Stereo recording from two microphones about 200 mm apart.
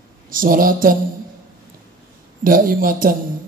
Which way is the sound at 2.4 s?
45° right (ahead or behind).